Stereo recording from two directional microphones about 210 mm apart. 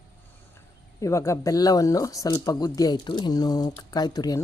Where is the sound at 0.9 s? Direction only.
15° left (ahead or behind).